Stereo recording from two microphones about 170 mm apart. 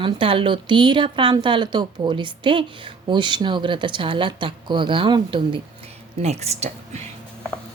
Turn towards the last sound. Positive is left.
turn(degrees=-40)  # may be behind; listen again after turning